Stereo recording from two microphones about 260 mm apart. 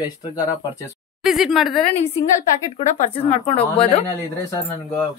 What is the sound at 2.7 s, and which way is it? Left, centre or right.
Speech, left.